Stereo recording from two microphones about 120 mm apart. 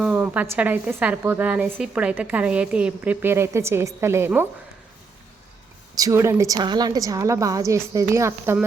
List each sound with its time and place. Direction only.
0.0 s a sound: 10° right (ahead or behind)
0.4 s a woman's voice: 15° right (ahead or behind)
5.9 s a woman's voice: 30° right (ahead or behind)
6.6 s a woman's voice: 35° right (ahead or behind)